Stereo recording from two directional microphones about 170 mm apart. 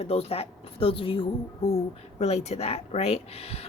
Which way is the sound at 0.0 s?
35° left (ahead or behind).